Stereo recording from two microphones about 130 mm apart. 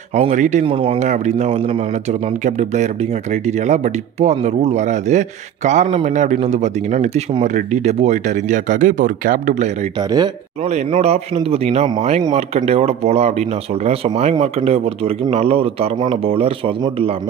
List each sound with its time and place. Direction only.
0.1 s speech: 65° right (ahead or behind)
0.7 s a man's voice: 45° right (ahead or behind)
0.9 s a man's voice: 65° right (ahead or behind)
10.9 s a man's voice: 55° right (ahead or behind)